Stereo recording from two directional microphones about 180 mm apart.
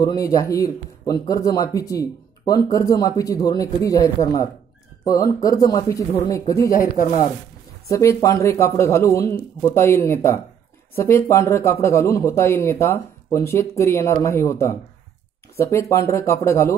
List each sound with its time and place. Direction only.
0.0 s speech: 20° left (ahead or behind)
6.8 s speech: 50° left (ahead or behind)
7.9 s speech: 15° left (ahead or behind)